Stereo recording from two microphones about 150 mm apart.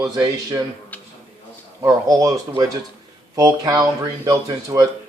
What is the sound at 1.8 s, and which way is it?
A man's voice, 20° right (ahead or behind).